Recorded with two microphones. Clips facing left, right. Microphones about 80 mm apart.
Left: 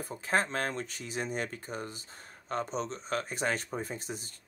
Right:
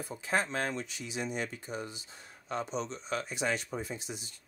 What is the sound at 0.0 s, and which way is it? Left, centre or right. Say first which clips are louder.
Speech: left 2 dB; left.